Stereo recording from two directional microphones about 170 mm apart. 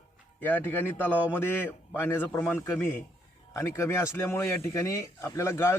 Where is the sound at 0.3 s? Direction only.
10° left (ahead or behind).